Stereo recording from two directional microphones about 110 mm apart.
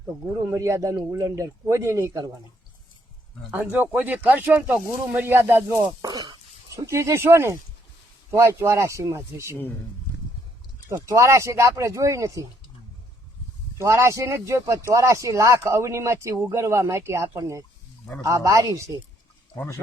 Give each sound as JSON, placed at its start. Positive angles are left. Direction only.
{"t": 0.4, "sound": "speech", "side_deg": -25}
{"t": 3.5, "sound": "speech", "side_deg": -15}
{"t": 6.1, "sound": "throat clearing", "side_deg": -40}
{"t": 6.7, "sound": "speech", "side_deg": -25}
{"t": 10.8, "sound": "speech", "side_deg": -25}
{"t": 13.7, "sound": "speech", "side_deg": -25}